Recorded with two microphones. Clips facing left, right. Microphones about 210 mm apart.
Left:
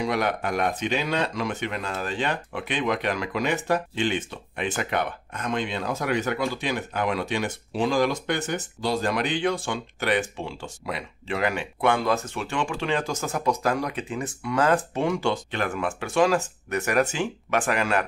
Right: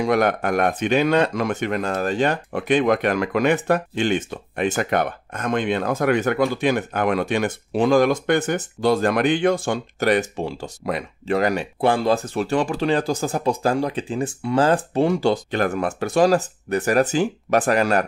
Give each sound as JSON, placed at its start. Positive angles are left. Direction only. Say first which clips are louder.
{"t": 0.0, "sound": "speech", "louder": "right 6 dB", "side_deg": -50}